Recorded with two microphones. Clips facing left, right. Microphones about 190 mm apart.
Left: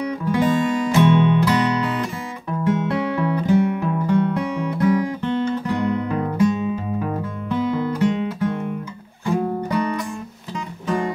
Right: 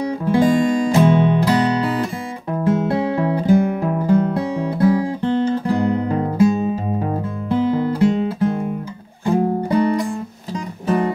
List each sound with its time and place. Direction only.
0.0 s music: 30° right (ahead or behind)